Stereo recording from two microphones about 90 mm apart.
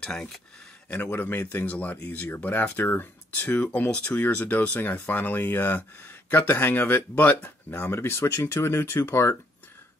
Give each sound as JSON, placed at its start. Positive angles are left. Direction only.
{"t": 0.0, "sound": "speech", "side_deg": 10}